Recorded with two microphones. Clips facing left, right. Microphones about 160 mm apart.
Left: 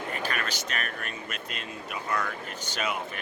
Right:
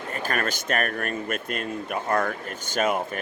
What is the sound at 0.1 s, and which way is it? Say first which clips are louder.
Speech: right 7 dB; 45° right (ahead or behind).